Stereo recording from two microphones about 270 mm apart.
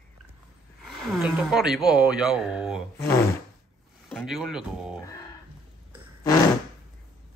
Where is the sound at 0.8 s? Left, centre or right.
Centre.